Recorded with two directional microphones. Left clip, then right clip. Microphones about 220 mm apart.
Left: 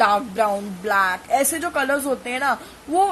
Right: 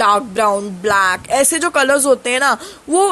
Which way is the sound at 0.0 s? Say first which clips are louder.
Right 5 dB; 35° right (ahead or behind).